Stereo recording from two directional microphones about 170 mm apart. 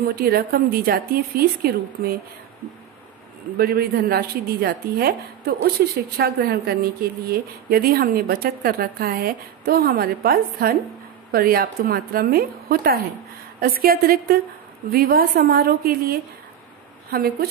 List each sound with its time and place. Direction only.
0.0 s a woman's voice: 65° right (ahead or behind)
3.5 s a woman's voice: 65° right (ahead or behind)